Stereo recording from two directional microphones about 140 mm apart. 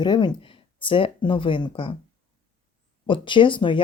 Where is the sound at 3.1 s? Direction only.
35° left (ahead or behind).